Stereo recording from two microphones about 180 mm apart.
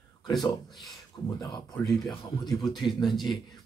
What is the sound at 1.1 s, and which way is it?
Speech, 25° left (ahead or behind).